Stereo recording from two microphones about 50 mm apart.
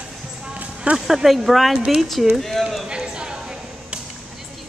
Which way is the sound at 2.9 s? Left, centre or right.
Centre.